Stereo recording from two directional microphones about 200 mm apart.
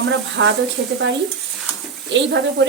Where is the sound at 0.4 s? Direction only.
65° right (ahead or behind).